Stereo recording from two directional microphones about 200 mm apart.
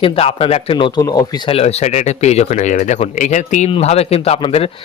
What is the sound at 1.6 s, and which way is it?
Speech, 30° left (ahead or behind).